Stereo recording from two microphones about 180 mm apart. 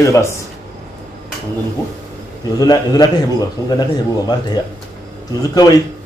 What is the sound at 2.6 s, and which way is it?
A man's voice, 20° left (ahead or behind).